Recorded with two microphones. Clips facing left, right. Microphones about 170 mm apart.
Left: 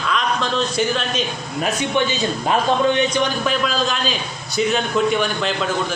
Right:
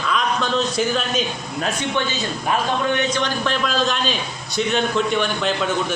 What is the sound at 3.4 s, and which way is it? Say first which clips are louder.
A man's voice: left 1 dB; 5° left (ahead or behind).